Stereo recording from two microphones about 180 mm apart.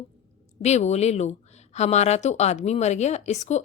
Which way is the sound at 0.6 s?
40° left (ahead or behind).